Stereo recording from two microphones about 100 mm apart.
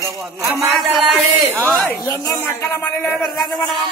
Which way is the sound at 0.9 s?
5° right (ahead or behind).